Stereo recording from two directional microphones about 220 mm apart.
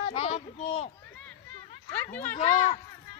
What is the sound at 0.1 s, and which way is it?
Speech, 25° left (ahead or behind).